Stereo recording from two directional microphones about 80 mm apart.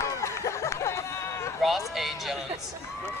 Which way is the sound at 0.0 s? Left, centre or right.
Left.